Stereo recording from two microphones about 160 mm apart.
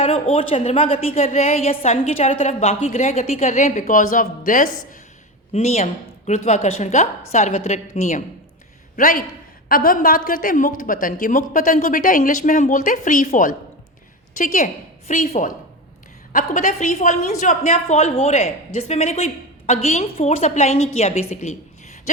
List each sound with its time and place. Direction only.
0.0 s a woman's voice: 40° left (ahead or behind); by 4.9 s 55° left (ahead or behind)
5.5 s a woman's voice: 45° left (ahead or behind)
9.0 s a woman's voice: 60° left (ahead or behind); by 21.5 s 40° left (ahead or behind)